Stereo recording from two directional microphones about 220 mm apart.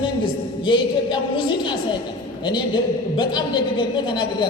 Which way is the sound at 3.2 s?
20° left (ahead or behind).